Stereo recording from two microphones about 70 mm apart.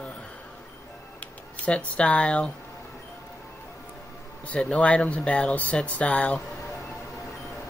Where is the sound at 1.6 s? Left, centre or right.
Centre.